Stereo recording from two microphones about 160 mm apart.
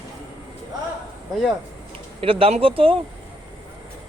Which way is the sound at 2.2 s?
35° right (ahead or behind).